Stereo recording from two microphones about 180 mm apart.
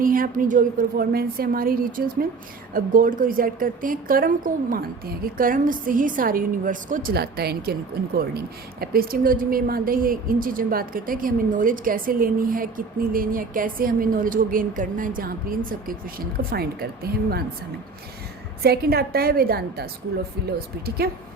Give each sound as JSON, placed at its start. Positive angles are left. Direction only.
{"t": 0.0, "sound": "a woman's voice", "side_deg": -50}
{"t": 18.6, "sound": "a woman's voice", "side_deg": -60}